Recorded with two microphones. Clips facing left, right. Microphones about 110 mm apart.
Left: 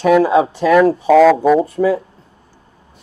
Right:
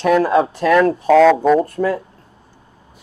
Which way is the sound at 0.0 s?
5° left (ahead or behind).